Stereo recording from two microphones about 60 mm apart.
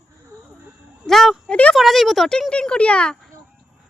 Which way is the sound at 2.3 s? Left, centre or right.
Centre.